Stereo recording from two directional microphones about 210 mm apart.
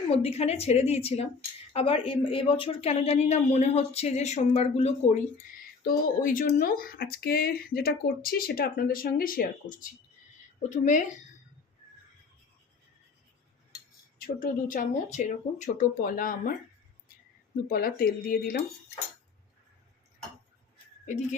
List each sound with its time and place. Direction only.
0.1 s a woman's voice: 30° left (ahead or behind)
6.2 s a woman's voice: 40° left (ahead or behind)
14.2 s a woman's voice: 40° left (ahead or behind)
17.7 s speech: 45° left (ahead or behind)